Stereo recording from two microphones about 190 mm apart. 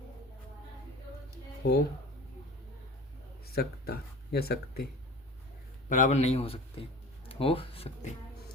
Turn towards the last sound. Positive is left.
turn(degrees=30)  # may be behind; listen again after turning